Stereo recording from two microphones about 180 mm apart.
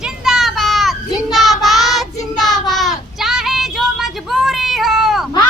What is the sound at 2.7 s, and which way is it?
Child singing, centre (ahead or behind).